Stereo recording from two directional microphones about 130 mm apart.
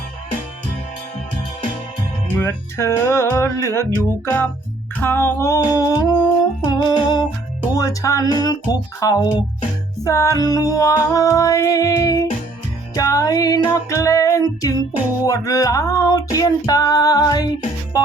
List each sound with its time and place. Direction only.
2.4 s music: 20° left (ahead or behind)